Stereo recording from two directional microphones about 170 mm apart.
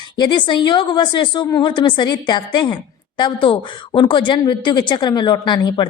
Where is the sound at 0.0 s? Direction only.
25° left (ahead or behind).